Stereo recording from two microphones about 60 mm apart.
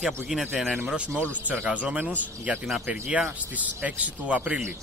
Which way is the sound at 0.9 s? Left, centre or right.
Right.